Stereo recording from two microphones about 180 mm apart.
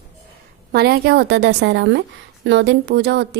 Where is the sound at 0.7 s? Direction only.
60° right (ahead or behind).